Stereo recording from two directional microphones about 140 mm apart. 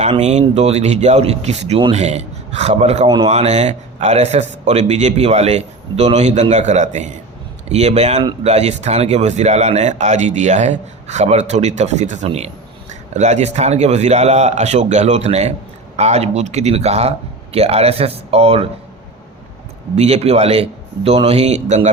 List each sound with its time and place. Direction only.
0.0 s speech: 55° right (ahead or behind)
3.1 s speech: 30° right (ahead or behind)
3.3 s speech: 50° right (ahead or behind)
20.0 s speech: 50° right (ahead or behind)